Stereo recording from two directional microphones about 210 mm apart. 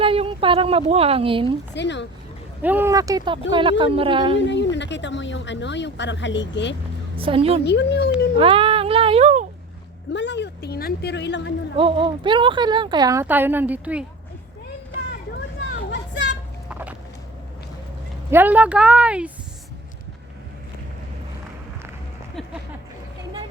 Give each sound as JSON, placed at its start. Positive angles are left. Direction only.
{"t": 0.0, "sound": "speech", "side_deg": -25}
{"t": 1.7, "sound": "speech", "side_deg": 55}
{"t": 2.6, "sound": "speech", "side_deg": -10}
{"t": 4.4, "sound": "speech", "side_deg": 55}
{"t": 7.2, "sound": "speech", "side_deg": -25}
{"t": 7.6, "sound": "speech", "side_deg": 55}
{"t": 8.4, "sound": "a sound", "side_deg": -25}
{"t": 10.1, "sound": "speech", "side_deg": 55}
{"t": 11.8, "sound": "speech", "side_deg": -25}
{"t": 15.9, "sound": "a sound", "side_deg": 55}
{"t": 16.6, "sound": "vehicle", "side_deg": -5}
{"t": 18.3, "sound": "speech", "side_deg": -10}